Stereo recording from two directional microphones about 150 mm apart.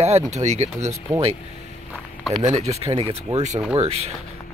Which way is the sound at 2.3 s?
45° right (ahead or behind).